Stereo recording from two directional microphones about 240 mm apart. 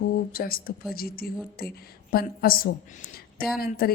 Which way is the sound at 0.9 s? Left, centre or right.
Left.